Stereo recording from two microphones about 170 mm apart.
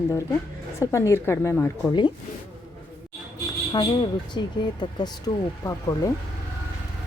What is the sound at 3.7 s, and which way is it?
Speech, 25° left (ahead or behind).